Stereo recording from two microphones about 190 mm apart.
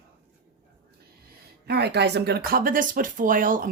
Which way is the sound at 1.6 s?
60° right (ahead or behind).